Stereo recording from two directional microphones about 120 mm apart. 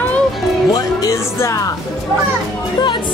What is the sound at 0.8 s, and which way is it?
Music, 30° left (ahead or behind).